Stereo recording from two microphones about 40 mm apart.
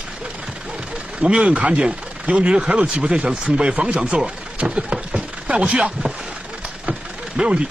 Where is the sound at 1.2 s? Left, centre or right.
Right.